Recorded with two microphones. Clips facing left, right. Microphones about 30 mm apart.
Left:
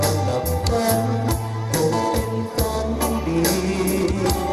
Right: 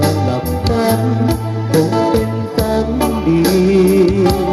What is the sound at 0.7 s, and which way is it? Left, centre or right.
Music, right.